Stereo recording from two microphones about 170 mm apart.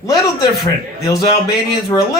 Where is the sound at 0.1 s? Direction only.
25° left (ahead or behind).